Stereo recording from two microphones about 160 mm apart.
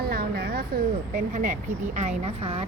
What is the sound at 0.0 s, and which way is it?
Speech, 75° right (ahead or behind).